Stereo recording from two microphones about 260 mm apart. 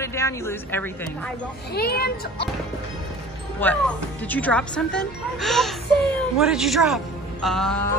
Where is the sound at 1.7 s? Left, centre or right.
Left.